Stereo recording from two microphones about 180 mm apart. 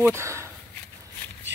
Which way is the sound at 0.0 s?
15° right (ahead or behind).